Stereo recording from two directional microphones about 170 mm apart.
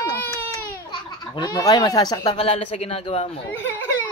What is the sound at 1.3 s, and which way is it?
Speech, 25° left (ahead or behind).